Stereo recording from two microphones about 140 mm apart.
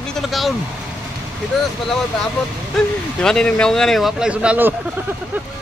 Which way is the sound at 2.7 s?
5° left (ahead or behind).